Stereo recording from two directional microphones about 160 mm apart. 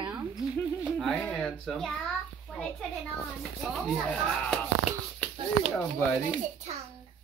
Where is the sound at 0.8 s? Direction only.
Centre (ahead or behind).